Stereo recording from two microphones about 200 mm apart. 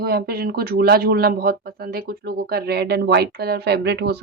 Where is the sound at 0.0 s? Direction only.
50° right (ahead or behind).